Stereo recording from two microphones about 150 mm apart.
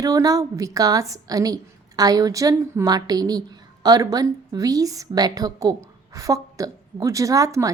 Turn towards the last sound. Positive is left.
turn(degrees=-20)  # may be behind; listen again after turning